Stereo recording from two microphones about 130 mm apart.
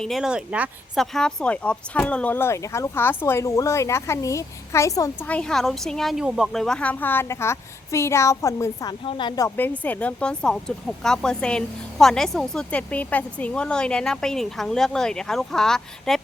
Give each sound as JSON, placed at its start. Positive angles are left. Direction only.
{"t": 0.0, "sound": "speech", "side_deg": 0}
{"t": 0.9, "sound": "speech", "side_deg": 5}
{"t": 5.2, "sound": "a woman's voice", "side_deg": 10}
{"t": 8.9, "sound": "speech", "side_deg": 40}
{"t": 9.6, "sound": "speech", "side_deg": 15}